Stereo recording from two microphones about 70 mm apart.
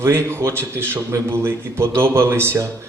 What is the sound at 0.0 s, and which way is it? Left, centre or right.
Speech, right.